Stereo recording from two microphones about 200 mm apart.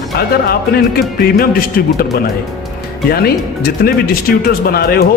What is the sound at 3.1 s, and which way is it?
Speech, 50° left (ahead or behind).